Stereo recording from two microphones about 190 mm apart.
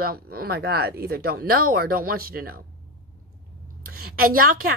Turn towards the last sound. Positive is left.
turn(degrees=-50)  # may be behind; listen again after turning